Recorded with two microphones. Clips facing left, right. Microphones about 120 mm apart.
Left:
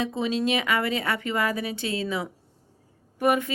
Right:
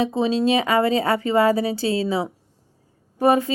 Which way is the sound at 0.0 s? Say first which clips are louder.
Right 6 dB; 30° right (ahead or behind).